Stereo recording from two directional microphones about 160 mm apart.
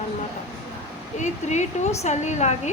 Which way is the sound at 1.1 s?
45° left (ahead or behind).